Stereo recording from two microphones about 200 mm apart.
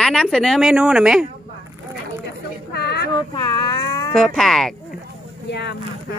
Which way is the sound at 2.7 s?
55° left (ahead or behind).